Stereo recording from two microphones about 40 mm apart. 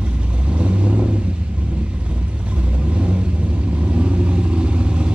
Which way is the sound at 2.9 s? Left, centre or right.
Right.